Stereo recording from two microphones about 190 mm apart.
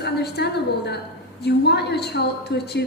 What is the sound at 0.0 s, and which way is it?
A woman's voice, 60° left (ahead or behind).